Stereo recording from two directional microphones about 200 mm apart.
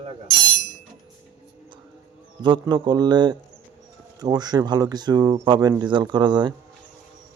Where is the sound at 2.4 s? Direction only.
20° right (ahead or behind).